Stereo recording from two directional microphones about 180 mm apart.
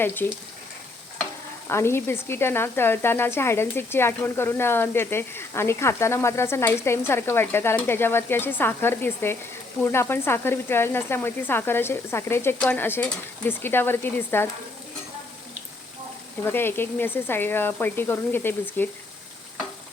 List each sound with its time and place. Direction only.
0.0 s speech: 10° left (ahead or behind)
1.7 s speech: 15° left (ahead or behind)
16.4 s speech: 10° left (ahead or behind)